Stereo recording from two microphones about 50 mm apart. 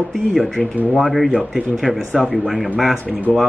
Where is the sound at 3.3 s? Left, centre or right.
Left.